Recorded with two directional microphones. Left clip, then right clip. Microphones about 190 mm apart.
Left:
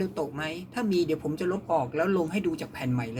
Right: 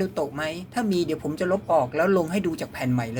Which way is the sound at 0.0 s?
30° right (ahead or behind).